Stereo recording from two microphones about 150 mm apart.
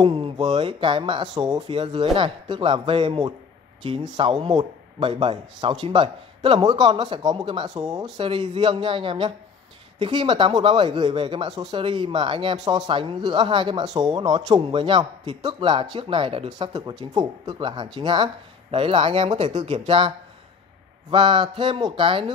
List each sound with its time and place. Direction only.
0.0 s speech: 40° right (ahead or behind)
8.3 s speech: 35° right (ahead or behind)
19.2 s speech: 50° right (ahead or behind)
21.1 s speech: 35° right (ahead or behind)